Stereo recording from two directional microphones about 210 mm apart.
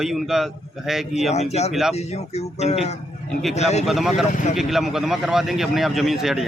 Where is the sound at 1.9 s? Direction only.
30° left (ahead or behind).